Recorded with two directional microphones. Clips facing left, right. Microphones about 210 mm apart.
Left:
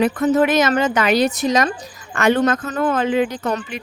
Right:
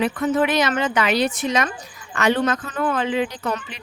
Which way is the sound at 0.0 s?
45° left (ahead or behind).